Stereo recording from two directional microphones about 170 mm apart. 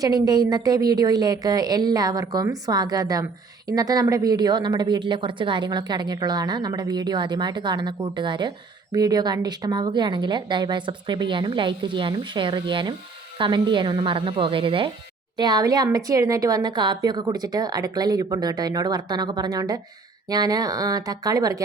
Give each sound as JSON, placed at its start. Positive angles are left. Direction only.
{"t": 0.0, "sound": "speech", "side_deg": -20}